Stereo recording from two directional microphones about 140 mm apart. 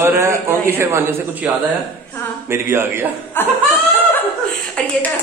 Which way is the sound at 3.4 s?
15° left (ahead or behind).